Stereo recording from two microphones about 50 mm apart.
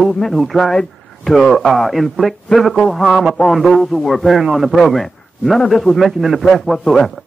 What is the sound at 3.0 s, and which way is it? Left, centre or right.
A man's voice, centre.